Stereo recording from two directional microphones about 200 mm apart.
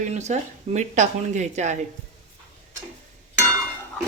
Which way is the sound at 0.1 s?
35° right (ahead or behind).